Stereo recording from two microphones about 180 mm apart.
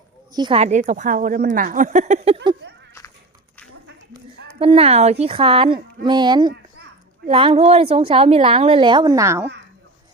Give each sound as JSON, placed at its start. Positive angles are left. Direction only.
{"t": 0.3, "sound": "speech", "side_deg": -30}
{"t": 4.6, "sound": "a woman's voice", "side_deg": -30}